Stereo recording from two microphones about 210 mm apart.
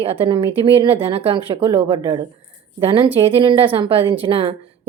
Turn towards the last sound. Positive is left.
turn(degrees=-25)  # may be behind; listen again after turning